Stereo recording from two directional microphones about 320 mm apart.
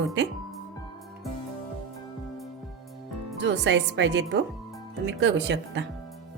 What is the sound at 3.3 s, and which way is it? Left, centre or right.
Speech, right.